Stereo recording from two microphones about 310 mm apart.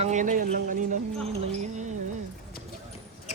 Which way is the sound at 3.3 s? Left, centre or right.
Left.